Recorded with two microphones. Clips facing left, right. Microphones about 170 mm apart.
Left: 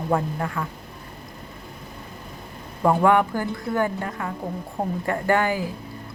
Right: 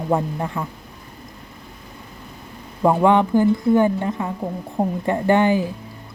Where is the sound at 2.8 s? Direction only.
20° right (ahead or behind).